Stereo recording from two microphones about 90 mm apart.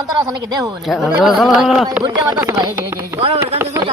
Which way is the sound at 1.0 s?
10° right (ahead or behind).